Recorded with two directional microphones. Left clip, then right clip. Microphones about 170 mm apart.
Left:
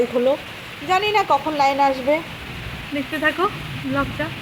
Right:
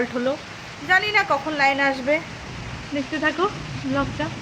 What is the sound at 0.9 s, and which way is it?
Speech, 15° left (ahead or behind).